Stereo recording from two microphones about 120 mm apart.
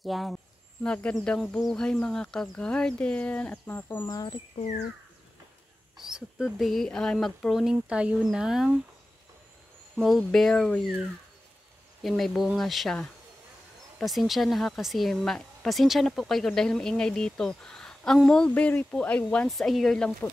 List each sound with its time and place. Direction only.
0.0 s speech: centre (ahead or behind); by 4.1 s 20° left (ahead or behind)
4.1 s speech: 35° left (ahead or behind)
5.9 s speech: 5° right (ahead or behind)
9.9 s speech: centre (ahead or behind)
12.0 s speech: centre (ahead or behind)